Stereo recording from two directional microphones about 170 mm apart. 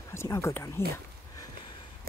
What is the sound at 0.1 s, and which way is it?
Speech, 15° left (ahead or behind).